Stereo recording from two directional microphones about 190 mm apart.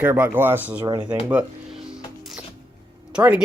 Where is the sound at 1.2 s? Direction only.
5° right (ahead or behind).